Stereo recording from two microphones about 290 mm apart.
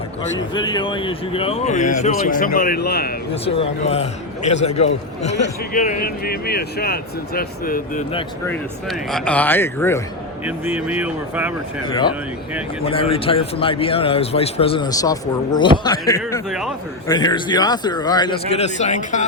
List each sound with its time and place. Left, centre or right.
0.3 s a man's voice: centre; by 3.1 s left
3.4 s a man's voice: centre
8.4 s a man's voice: centre
10.4 s speech: centre
12.8 s a man's voice: centre